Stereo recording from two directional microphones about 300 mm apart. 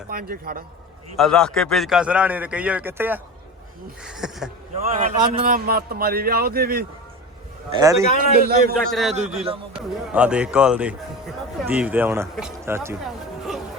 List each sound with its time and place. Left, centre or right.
0.1 s a man's voice: right
1.1 s speech: centre
4.9 s a man's voice: right
7.8 s speech: centre
8.2 s a man's voice: right
9.7 s speech: centre